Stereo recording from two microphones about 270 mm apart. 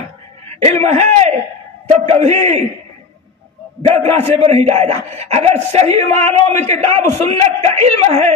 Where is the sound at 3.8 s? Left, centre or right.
Right.